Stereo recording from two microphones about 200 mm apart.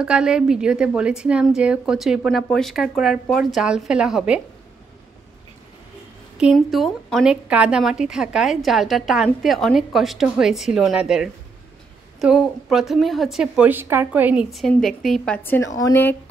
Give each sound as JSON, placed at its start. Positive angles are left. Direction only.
{"t": 0.0, "sound": "a woman's voice", "side_deg": -5}
{"t": 6.3, "sound": "a woman's voice", "side_deg": 0}